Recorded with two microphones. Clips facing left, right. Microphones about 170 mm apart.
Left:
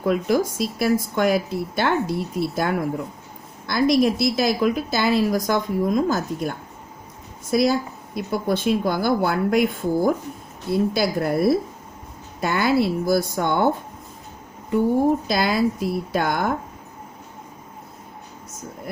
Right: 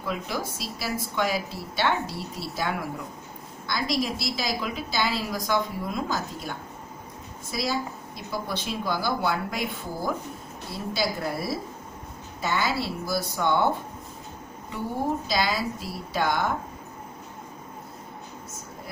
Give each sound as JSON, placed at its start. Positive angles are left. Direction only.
{"t": 0.1, "sound": "speech", "side_deg": 55}
{"t": 3.8, "sound": "a woman's voice", "side_deg": 55}
{"t": 7.5, "sound": "a woman's voice", "side_deg": 55}
{"t": 15.3, "sound": "a woman's voice", "side_deg": 55}